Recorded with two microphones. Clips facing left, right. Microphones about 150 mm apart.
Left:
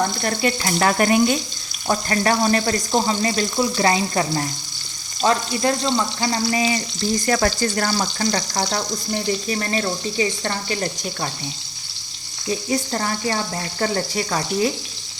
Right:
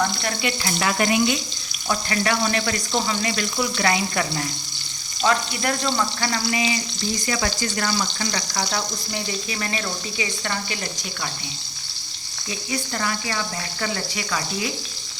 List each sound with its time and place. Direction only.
0.0 s frying: 40° left (ahead or behind)
1.9 s speech: 40° left (ahead or behind); by 6.4 s 20° left (ahead or behind)
6.5 s speech: 40° left (ahead or behind)
12.5 s speech: 35° left (ahead or behind)